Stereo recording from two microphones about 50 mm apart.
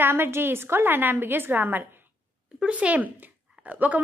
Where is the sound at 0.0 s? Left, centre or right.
Right.